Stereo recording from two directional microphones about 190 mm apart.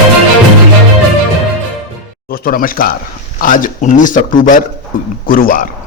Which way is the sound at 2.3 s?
50° left (ahead or behind).